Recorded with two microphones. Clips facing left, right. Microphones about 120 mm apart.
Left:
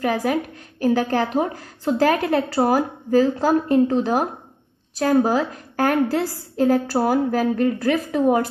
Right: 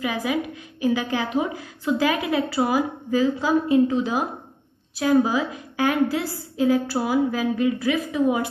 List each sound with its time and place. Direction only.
0.0 s a woman's voice: 50° left (ahead or behind)